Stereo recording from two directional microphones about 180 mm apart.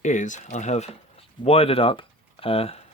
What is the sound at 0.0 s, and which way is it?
Speech, 40° left (ahead or behind).